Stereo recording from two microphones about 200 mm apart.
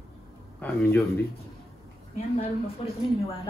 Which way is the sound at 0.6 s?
10° left (ahead or behind).